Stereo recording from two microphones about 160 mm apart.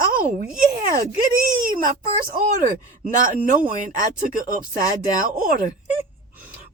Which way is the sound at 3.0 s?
60° right (ahead or behind).